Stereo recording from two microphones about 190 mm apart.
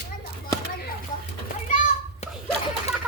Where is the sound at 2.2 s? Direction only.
35° left (ahead or behind).